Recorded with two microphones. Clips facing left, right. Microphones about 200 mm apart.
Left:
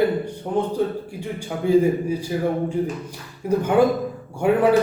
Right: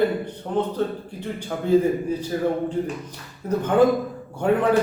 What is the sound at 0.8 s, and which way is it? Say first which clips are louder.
A man's voice: left 2 dB; 10° left (ahead or behind).